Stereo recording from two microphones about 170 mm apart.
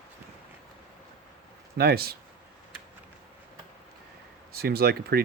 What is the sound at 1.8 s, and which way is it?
Speech, 65° right (ahead or behind).